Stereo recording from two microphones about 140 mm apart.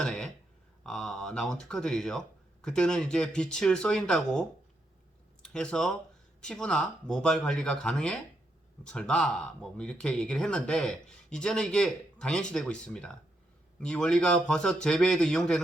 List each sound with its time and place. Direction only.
0.0 s speech: 5° left (ahead or behind)